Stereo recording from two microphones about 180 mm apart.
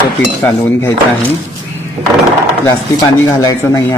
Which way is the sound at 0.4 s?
10° left (ahead or behind).